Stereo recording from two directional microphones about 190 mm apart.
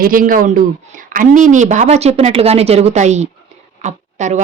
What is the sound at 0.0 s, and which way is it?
Speech, 45° right (ahead or behind).